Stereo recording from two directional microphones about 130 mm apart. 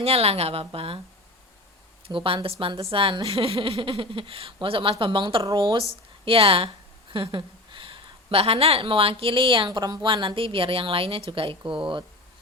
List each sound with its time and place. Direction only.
0.0 s speech: 50° right (ahead or behind)
2.0 s a woman's voice: 45° right (ahead or behind)